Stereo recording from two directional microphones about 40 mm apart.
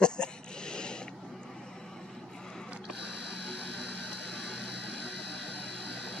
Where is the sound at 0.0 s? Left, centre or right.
Left.